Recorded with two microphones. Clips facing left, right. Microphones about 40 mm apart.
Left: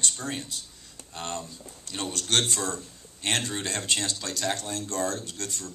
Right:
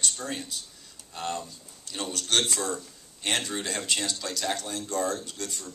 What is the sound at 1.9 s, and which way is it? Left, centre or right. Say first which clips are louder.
Speech: even; left.